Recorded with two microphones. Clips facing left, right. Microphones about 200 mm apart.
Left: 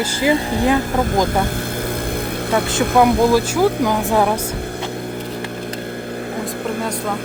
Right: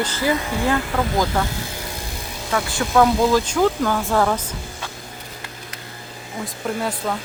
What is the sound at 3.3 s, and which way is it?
Speech, 10° left (ahead or behind).